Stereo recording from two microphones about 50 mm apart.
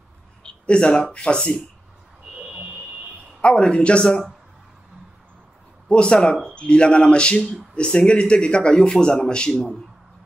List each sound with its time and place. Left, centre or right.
0.4 s speech: left
3.3 s speech: left
5.9 s speech: centre